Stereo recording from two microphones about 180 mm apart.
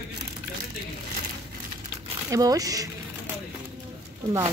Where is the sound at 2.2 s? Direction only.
20° right (ahead or behind).